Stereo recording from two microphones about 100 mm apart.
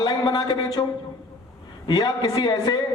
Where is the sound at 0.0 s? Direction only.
45° left (ahead or behind).